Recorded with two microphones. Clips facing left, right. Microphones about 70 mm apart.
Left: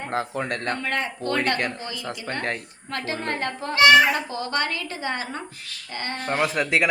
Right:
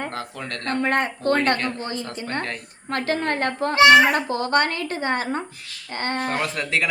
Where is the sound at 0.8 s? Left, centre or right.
Right.